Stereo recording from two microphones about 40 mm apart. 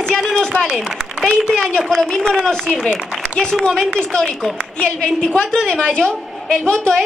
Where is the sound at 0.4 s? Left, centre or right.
Left.